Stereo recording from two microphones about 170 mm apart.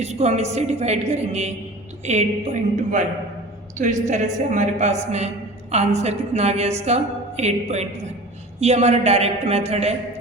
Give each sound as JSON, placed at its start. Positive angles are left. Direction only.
{"t": 0.0, "sound": "a woman's voice", "side_deg": -40}